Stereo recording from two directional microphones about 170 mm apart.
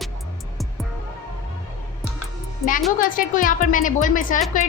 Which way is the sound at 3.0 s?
55° left (ahead or behind).